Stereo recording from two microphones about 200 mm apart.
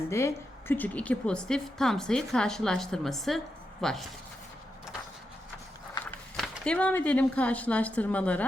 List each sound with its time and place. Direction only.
0.1 s a woman's voice: 15° left (ahead or behind)
6.1 s speech: 5° left (ahead or behind)